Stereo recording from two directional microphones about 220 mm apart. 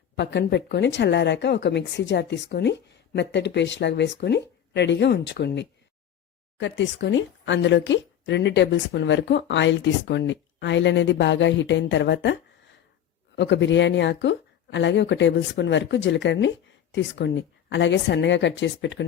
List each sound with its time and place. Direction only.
0.2 s speech: 50° left (ahead or behind)